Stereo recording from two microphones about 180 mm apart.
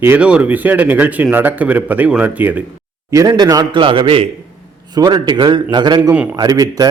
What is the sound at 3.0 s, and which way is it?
A man's voice, 20° right (ahead or behind).